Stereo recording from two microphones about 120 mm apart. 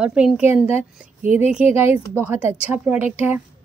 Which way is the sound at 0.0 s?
10° right (ahead or behind).